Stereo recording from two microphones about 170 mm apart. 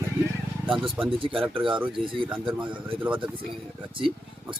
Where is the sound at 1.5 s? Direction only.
30° right (ahead or behind).